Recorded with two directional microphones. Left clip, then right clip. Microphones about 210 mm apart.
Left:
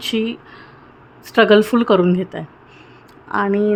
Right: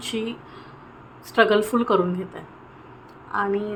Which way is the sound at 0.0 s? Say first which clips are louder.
Left 7 dB; 30° left (ahead or behind).